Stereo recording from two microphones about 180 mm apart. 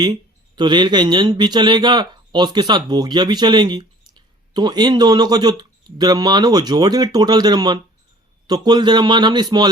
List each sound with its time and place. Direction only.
0.0 s speech: 25° right (ahead or behind)